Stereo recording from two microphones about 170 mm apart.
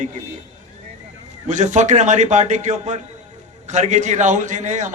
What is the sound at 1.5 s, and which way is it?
A man's voice, 45° right (ahead or behind).